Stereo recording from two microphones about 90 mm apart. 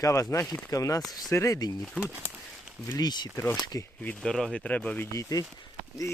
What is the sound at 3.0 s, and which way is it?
Speech, 50° left (ahead or behind).